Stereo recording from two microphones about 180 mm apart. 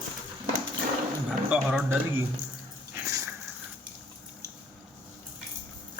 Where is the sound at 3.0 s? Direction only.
20° right (ahead or behind).